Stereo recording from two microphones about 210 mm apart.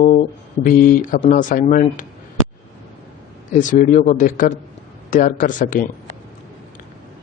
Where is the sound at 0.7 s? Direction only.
40° left (ahead or behind).